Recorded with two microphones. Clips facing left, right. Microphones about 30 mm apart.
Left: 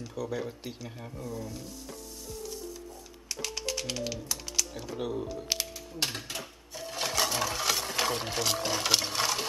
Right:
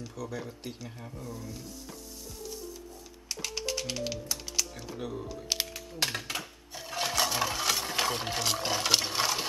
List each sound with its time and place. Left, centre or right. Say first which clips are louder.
0.1 s speech: left 7 dB; centre
3.5 s typing: right 1 dB; centre
4.9 s speech: left 4 dB; centre
5.5 s speech: right 1 dB; centre
6.1 s speech: right 3 dB; right
7.0 s a sound: right 1 dB; centre